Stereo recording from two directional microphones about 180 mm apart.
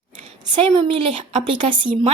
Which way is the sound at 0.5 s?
25° right (ahead or behind).